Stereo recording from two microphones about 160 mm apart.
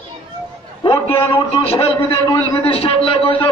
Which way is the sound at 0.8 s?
35° left (ahead or behind).